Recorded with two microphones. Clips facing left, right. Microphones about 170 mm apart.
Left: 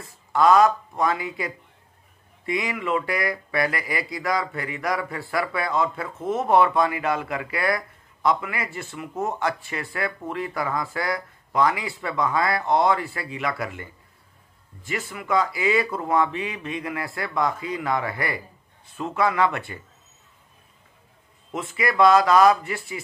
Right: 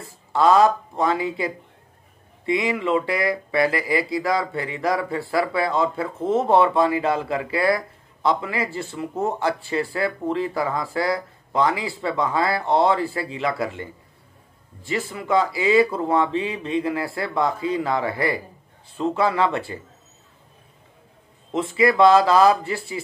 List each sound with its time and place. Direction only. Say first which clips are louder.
0.0 s speech: right 1 dB; 30° right (ahead or behind)
21.5 s speech: right 7 dB; 30° right (ahead or behind)